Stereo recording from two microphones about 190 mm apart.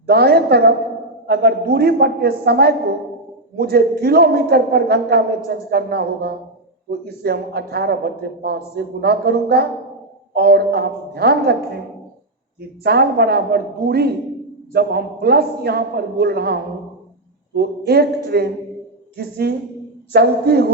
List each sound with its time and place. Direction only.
0.0 s a woman's voice: 55° right (ahead or behind)
12.8 s a woman's voice: 55° right (ahead or behind)